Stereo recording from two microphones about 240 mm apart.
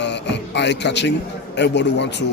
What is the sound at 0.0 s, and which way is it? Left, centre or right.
Music, left.